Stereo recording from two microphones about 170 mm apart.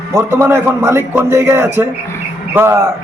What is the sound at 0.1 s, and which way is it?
A man's voice, 15° right (ahead or behind).